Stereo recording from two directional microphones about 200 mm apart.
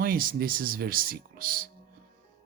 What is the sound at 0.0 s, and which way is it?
Speech, 45° right (ahead or behind).